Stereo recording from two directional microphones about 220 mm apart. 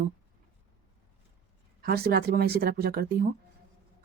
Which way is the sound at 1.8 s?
45° right (ahead or behind).